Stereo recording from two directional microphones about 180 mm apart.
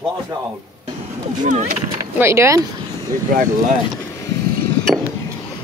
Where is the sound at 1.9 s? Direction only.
15° right (ahead or behind).